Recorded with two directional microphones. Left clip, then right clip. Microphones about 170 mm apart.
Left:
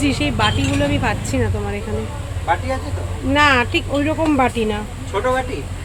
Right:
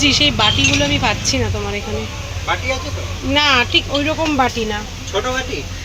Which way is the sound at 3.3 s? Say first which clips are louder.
Even; 15° left (ahead or behind).